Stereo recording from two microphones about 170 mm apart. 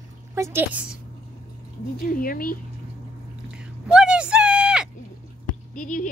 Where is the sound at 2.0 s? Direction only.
55° left (ahead or behind).